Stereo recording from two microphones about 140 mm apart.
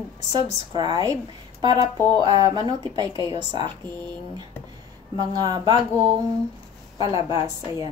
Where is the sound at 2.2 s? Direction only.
30° right (ahead or behind).